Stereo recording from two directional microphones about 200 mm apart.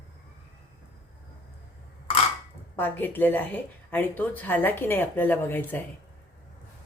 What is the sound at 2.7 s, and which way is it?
Speech, 10° left (ahead or behind).